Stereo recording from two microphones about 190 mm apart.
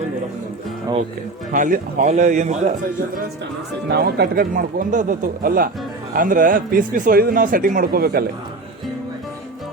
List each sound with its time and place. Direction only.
1.5 s a man's voice: 45° right (ahead or behind)
3.8 s a man's voice: 60° right (ahead or behind)